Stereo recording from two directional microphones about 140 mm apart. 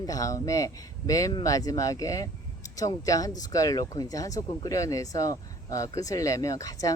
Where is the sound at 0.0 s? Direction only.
25° left (ahead or behind).